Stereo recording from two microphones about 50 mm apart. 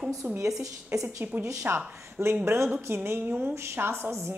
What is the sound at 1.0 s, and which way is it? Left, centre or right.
Speech, right.